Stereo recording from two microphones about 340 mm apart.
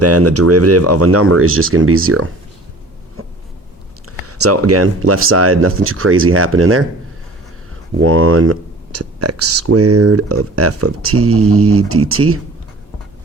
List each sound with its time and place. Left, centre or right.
0.0 s speech: right
3.2 s a sound: right
4.3 s speech: right
7.9 s speech: right